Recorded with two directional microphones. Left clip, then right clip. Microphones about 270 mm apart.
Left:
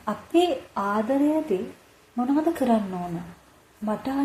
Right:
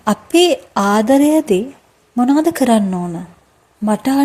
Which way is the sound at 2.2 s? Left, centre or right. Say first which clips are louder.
Right 10 dB; right.